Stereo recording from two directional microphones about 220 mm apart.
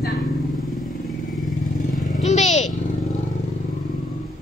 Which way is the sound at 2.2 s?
30° left (ahead or behind).